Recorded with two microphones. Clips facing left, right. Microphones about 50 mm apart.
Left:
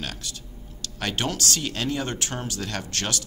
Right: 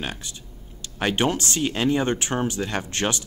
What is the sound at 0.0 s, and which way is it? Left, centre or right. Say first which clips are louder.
Speech: right 2 dB; right.